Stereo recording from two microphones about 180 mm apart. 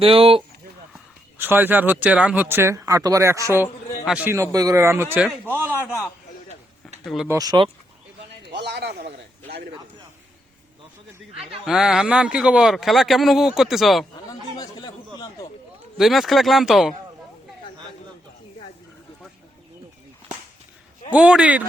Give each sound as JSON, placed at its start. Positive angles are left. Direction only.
{"t": 0.0, "sound": "speech", "side_deg": -30}
{"t": 1.4, "sound": "speech", "side_deg": -10}
{"t": 7.0, "sound": "speech", "side_deg": 0}
{"t": 7.3, "sound": "speech", "side_deg": -20}
{"t": 8.5, "sound": "a man's voice", "side_deg": -70}
{"t": 11.6, "sound": "speech", "side_deg": 0}
{"t": 14.5, "sound": "a sound", "side_deg": 25}
{"t": 16.0, "sound": "speech", "side_deg": 0}
{"t": 21.2, "sound": "speech", "side_deg": -5}